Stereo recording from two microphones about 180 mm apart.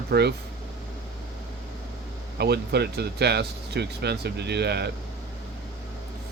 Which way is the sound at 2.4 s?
65° right (ahead or behind).